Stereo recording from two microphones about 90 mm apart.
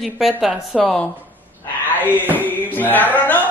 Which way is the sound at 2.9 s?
20° left (ahead or behind).